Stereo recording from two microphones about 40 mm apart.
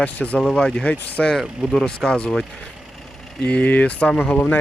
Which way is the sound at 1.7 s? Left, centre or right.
Centre.